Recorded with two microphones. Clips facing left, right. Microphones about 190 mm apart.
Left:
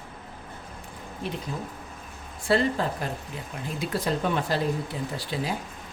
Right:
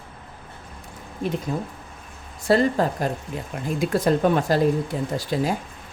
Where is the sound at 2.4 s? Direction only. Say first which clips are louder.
Right 5 dB; 45° right (ahead or behind).